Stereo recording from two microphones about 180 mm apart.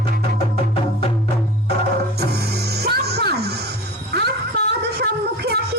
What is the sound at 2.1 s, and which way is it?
Music, 65° right (ahead or behind).